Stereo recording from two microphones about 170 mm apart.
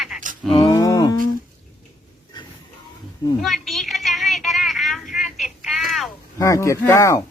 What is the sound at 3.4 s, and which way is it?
A woman's voice, centre (ahead or behind).